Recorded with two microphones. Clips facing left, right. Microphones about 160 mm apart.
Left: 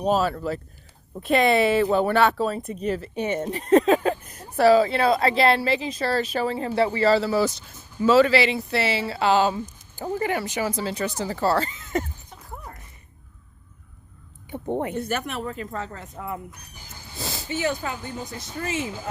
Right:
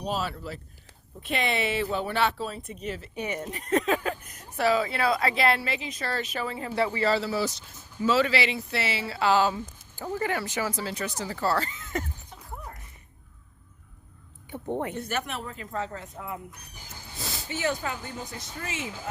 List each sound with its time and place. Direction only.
0.0 s a woman's voice: 45° left (ahead or behind)
3.2 s speech: 25° left (ahead or behind)
14.5 s speech: 15° left (ahead or behind)
14.9 s a woman's voice: 45° left (ahead or behind)
17.2 s speech: 30° left (ahead or behind)